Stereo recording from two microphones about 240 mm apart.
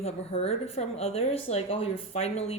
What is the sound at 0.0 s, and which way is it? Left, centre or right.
Speech, left.